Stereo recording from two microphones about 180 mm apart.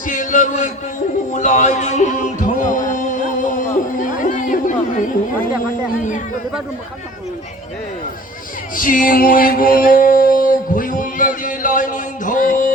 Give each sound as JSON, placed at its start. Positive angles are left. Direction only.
{"t": 0.0, "sound": "speech", "side_deg": 45}
{"t": 1.3, "sound": "music", "side_deg": 40}
{"t": 8.7, "sound": "music", "side_deg": 50}